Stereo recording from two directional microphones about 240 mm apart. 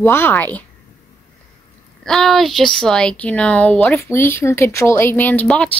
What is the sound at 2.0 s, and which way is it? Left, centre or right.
A woman's voice, centre.